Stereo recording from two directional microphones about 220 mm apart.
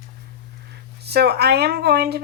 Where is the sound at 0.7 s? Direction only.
45° right (ahead or behind).